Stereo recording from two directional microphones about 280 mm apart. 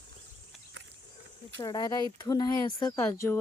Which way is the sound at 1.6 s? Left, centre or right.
Centre.